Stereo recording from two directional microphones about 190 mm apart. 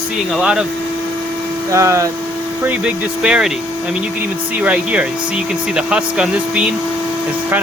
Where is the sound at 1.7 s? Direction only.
15° right (ahead or behind).